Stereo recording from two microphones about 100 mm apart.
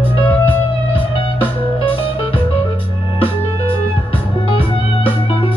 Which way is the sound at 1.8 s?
60° left (ahead or behind).